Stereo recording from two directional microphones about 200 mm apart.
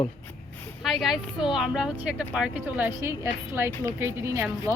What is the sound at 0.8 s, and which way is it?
Speech, centre (ahead or behind).